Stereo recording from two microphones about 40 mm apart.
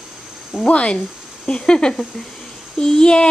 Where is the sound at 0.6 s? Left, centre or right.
Left.